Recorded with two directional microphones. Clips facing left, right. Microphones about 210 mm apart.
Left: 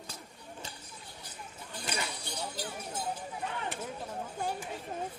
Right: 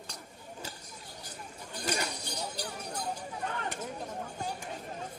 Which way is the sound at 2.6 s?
5° left (ahead or behind).